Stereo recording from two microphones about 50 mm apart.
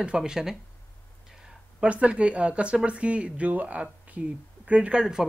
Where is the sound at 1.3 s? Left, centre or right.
Centre.